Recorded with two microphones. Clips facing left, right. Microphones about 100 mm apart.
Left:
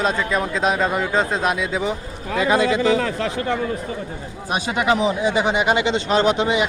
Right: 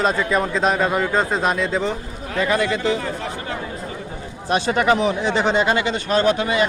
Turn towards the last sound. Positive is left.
turn(degrees=20)  # may be behind; listen again after turning